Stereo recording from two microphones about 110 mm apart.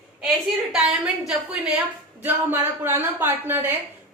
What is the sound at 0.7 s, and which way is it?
A woman's voice, 5° right (ahead or behind).